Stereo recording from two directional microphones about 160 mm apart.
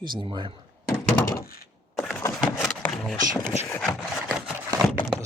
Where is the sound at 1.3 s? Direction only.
70° left (ahead or behind).